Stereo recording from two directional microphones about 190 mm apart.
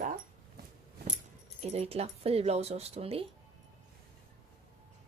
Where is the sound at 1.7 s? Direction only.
30° right (ahead or behind).